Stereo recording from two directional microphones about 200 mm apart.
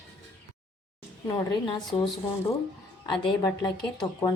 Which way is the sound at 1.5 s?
25° left (ahead or behind).